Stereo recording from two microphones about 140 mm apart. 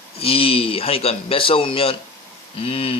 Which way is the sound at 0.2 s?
40° left (ahead or behind).